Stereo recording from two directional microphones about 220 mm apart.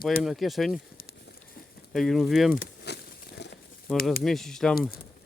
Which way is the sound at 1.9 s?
Centre (ahead or behind).